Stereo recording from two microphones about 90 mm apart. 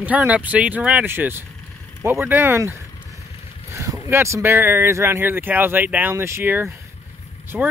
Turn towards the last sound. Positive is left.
turn(degrees=-15)  # may be behind; listen again after turning